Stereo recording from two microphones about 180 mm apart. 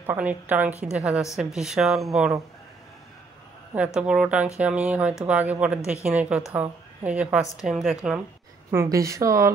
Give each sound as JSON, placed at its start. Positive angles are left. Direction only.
{"t": 0.0, "sound": "a woman's voice", "side_deg": -10}
{"t": 3.7, "sound": "a woman's voice", "side_deg": -5}
{"t": 8.7, "sound": "a woman's voice", "side_deg": -15}